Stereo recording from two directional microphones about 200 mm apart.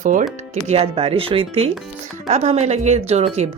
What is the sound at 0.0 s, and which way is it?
Speech, 40° right (ahead or behind).